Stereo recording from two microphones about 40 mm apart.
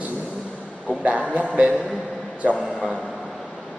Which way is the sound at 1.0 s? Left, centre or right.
Right.